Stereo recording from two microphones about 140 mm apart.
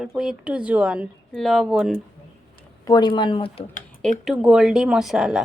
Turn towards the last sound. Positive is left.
turn(degrees=-5)  # may be behind; listen again after turning